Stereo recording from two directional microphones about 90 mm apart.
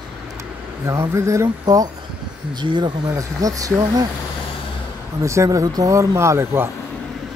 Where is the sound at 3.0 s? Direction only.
40° right (ahead or behind).